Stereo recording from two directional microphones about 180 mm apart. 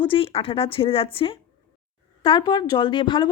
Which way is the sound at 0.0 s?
30° left (ahead or behind).